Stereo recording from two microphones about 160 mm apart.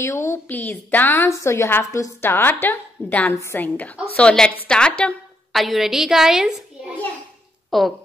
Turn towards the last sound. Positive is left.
turn(degrees=0)  # may be behind; listen again after turning